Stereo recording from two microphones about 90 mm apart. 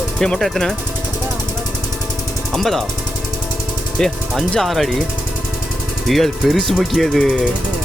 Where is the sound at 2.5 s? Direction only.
Centre (ahead or behind).